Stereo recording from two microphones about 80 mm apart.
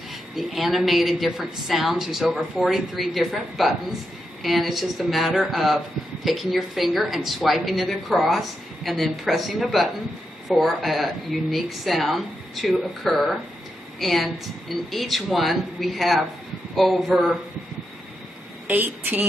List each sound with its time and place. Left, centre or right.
0.4 s speech: centre
18.7 s a woman's voice: right